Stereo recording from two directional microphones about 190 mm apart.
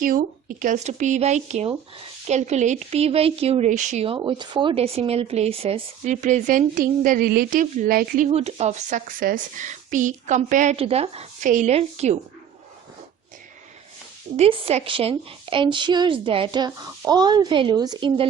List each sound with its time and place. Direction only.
0.0 s speech: 45° right (ahead or behind)
8.3 s speech: 35° right (ahead or behind)
14.3 s a woman's voice: 30° right (ahead or behind)